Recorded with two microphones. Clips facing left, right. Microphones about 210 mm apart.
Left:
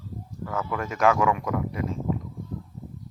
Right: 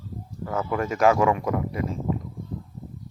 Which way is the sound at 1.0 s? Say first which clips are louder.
Right 2 dB; 35° right (ahead or behind).